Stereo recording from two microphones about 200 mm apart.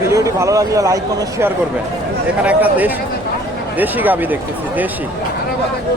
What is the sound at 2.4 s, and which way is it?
Speech, 5° right (ahead or behind).